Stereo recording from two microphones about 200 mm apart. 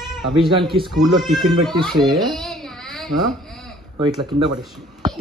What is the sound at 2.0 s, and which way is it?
Speech, 20° right (ahead or behind).